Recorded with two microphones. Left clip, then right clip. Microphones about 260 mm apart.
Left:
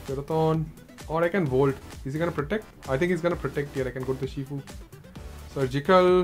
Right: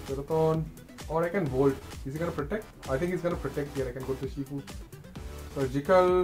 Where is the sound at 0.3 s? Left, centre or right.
Left.